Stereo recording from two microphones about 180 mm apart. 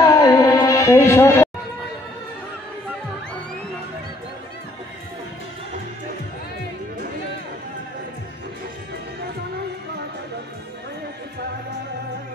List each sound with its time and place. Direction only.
0.0 s music: 20° left (ahead or behind)